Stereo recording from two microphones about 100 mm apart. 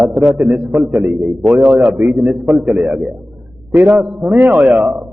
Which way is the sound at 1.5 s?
15° right (ahead or behind).